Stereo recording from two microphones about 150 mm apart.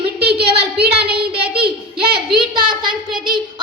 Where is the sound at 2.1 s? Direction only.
35° right (ahead or behind).